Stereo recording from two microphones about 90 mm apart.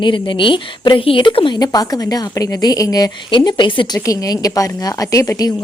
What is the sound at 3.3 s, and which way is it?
Speech, 55° left (ahead or behind).